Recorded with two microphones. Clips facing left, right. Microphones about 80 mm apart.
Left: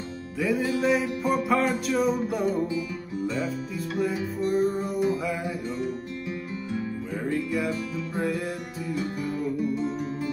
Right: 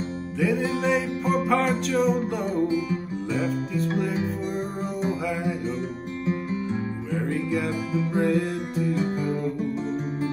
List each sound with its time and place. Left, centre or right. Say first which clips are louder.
0.4 s music: right 1 dB; centre
7.9 s music: right 7 dB; centre
8.2 s music: right 4 dB; centre
8.9 s music: right 4 dB; right